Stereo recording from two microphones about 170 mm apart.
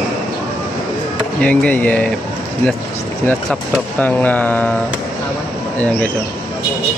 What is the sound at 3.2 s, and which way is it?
Speech, 5° left (ahead or behind).